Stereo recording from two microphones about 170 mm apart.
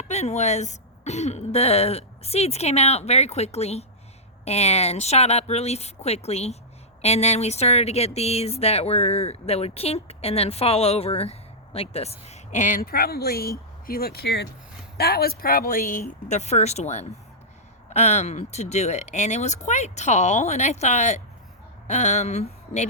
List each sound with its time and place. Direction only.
0.1 s speech: 40° left (ahead or behind)